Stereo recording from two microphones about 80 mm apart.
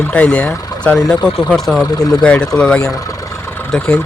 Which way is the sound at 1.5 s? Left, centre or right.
Centre.